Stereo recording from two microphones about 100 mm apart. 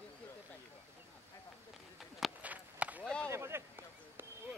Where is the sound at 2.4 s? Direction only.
15° right (ahead or behind).